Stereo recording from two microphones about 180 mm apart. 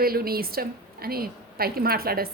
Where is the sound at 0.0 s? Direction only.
55° right (ahead or behind).